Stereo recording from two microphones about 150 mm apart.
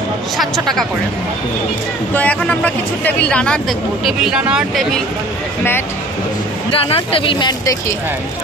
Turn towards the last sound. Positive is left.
turn(degrees=30)  # may be behind; listen again after turning